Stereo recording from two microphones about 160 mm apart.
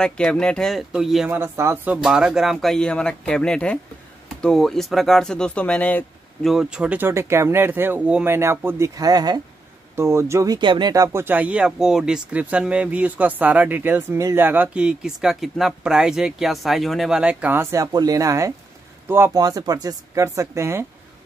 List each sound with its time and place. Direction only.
0.0 s speech: 5° left (ahead or behind)
1.3 s speech: 15° right (ahead or behind)
2.0 s speech: 5° right (ahead or behind)
6.5 s speech: 5° right (ahead or behind)